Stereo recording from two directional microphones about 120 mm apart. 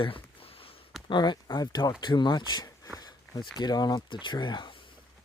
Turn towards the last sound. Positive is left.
turn(degrees=40)  # may be behind; listen again after turning